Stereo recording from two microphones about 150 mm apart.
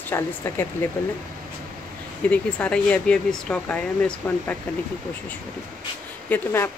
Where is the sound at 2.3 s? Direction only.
10° left (ahead or behind).